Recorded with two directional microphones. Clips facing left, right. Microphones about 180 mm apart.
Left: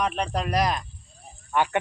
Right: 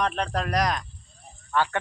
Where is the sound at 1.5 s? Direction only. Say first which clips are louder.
Left 1 dB; 15° left (ahead or behind).